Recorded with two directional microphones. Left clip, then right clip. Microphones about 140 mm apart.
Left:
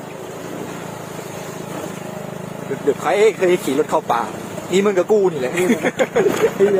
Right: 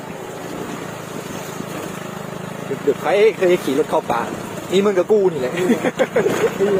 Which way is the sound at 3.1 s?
35° left (ahead or behind).